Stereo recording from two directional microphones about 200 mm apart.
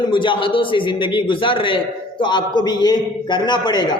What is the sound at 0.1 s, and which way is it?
A man's voice, 25° left (ahead or behind).